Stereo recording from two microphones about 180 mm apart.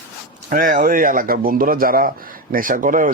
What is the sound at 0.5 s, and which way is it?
Speech, 50° right (ahead or behind).